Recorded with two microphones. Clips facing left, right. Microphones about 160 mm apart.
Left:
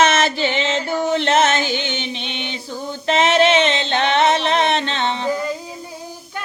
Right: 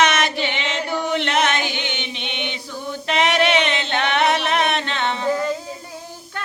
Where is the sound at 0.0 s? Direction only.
30° left (ahead or behind).